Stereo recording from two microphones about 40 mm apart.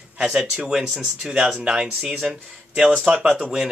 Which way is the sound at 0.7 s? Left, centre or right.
Centre.